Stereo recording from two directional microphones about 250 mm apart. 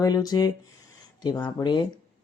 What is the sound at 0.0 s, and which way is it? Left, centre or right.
Speech, centre.